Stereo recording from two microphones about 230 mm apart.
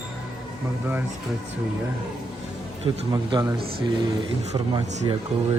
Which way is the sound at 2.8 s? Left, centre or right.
Centre.